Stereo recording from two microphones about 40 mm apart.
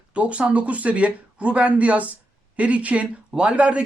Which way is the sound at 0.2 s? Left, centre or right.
Right.